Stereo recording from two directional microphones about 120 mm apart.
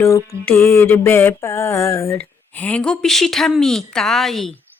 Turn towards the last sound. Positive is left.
turn(degrees=0)  # may be behind; listen again after turning